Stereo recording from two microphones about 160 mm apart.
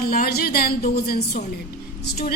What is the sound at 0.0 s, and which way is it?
A woman's voice, 70° left (ahead or behind).